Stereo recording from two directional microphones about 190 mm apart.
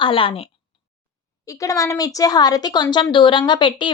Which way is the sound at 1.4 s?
15° left (ahead or behind).